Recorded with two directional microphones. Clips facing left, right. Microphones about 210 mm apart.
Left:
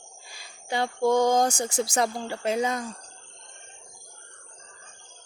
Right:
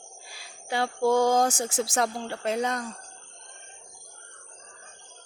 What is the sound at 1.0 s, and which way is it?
Speech, 5° right (ahead or behind).